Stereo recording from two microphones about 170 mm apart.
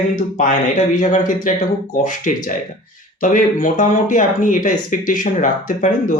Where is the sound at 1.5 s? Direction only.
50° left (ahead or behind).